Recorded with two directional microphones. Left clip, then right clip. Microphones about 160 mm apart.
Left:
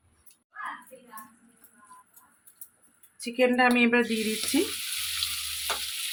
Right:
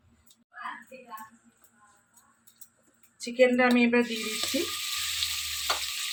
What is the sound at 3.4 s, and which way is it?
Speech, 70° left (ahead or behind).